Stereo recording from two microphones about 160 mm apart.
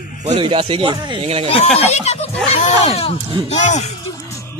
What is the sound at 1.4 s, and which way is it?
Speech, 40° left (ahead or behind).